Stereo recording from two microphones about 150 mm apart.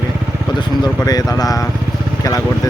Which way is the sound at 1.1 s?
25° left (ahead or behind).